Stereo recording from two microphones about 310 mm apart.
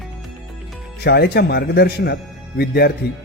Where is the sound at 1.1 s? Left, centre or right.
Left.